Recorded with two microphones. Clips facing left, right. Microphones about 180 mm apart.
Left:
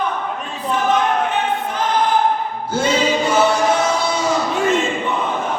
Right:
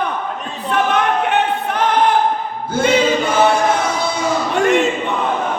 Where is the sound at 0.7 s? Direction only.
65° right (ahead or behind).